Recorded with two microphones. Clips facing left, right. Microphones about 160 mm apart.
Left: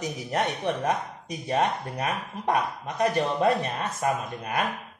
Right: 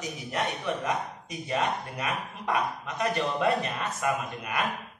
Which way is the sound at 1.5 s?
35° left (ahead or behind).